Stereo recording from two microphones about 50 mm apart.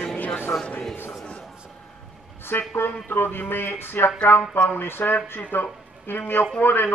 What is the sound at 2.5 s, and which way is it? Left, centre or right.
A man's voice, left.